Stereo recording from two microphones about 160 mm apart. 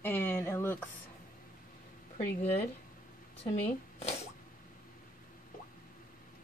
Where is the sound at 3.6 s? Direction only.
40° left (ahead or behind).